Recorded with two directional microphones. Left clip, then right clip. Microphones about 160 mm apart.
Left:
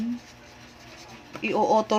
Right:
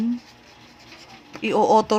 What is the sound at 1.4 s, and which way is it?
Speech, 35° right (ahead or behind).